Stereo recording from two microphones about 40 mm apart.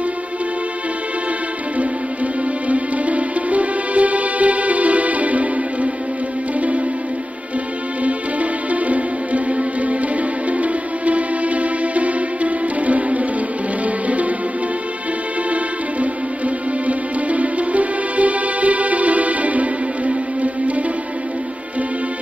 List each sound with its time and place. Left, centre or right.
2.7 s music: right
8.0 s music: right
15.5 s music: right